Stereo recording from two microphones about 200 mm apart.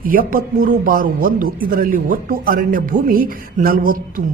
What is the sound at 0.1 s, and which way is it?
Speech, 45° right (ahead or behind).